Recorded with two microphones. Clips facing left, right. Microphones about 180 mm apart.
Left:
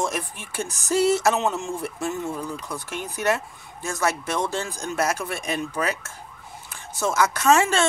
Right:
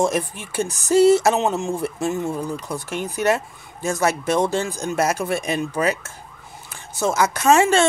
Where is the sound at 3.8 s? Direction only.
25° right (ahead or behind).